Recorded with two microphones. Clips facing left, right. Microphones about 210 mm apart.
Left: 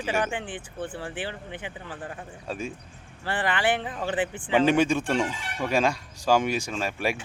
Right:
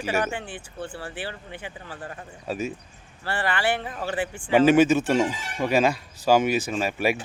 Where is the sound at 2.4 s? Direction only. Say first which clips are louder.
Right 4 dB; 5° right (ahead or behind).